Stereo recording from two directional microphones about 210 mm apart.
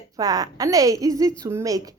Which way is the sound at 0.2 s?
15° right (ahead or behind).